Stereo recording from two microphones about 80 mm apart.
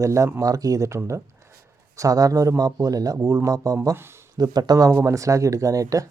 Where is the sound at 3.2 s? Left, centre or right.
Right.